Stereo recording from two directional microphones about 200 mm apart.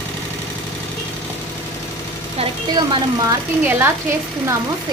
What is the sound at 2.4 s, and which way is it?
Speech, 20° right (ahead or behind).